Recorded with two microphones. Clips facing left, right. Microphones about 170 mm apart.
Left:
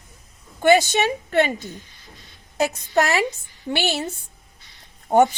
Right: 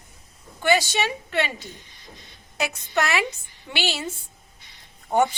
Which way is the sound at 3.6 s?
50° left (ahead or behind).